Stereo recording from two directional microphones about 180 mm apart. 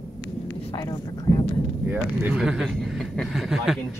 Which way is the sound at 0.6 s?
35° left (ahead or behind).